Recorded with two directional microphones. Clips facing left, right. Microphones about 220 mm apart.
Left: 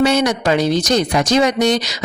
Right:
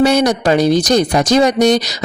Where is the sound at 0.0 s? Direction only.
35° right (ahead or behind).